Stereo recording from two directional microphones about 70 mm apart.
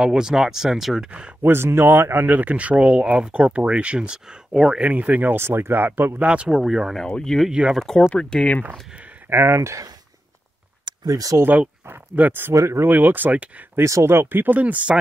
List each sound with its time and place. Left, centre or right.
0.0 s speech: centre
1.4 s speech: right; by 4.8 s centre
4.8 s speech: right
6.1 s speech: centre
6.5 s speech: centre
7.0 s speech: centre
9.3 s speech: right
11.1 s speech: right
12.2 s speech: right
12.5 s speech: right
12.8 s speech: right
13.7 s speech: right
14.3 s speech: right